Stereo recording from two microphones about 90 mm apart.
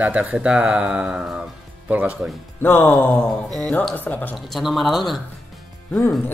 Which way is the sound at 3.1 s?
5° left (ahead or behind).